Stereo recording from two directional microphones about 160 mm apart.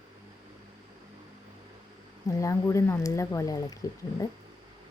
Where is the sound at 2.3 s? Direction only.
20° left (ahead or behind).